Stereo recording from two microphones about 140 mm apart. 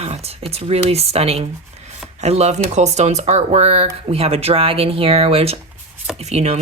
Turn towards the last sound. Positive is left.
turn(degrees=-50)  # may be behind; listen again after turning